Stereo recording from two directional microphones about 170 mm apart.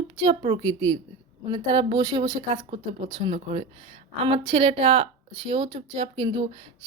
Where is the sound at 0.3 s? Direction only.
30° right (ahead or behind).